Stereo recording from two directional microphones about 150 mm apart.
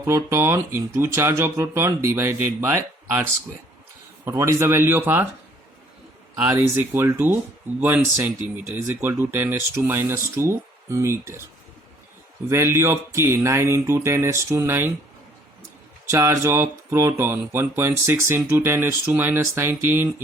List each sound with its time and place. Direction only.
0.0 s speech: 20° right (ahead or behind)
4.3 s speech: 20° right (ahead or behind)
6.5 s speech: 15° right (ahead or behind)
12.5 s speech: 15° right (ahead or behind)
16.0 s speech: 20° right (ahead or behind)